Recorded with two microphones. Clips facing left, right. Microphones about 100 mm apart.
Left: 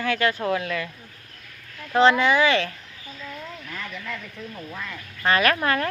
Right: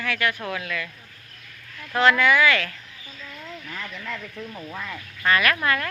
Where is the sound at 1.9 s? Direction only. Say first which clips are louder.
Left 1 dB; 25° left (ahead or behind).